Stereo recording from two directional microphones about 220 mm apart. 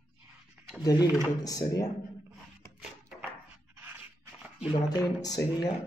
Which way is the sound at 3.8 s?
10° right (ahead or behind).